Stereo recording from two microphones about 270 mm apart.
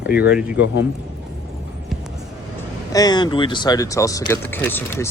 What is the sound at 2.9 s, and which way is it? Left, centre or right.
Speech, centre.